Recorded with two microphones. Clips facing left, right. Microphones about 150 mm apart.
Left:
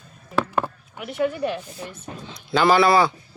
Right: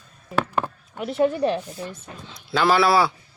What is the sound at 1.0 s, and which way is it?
Speech, 35° right (ahead or behind).